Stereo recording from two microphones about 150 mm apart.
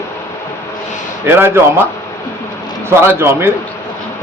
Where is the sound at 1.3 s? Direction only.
15° right (ahead or behind).